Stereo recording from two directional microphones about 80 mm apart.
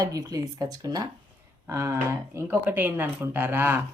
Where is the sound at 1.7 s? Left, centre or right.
Right.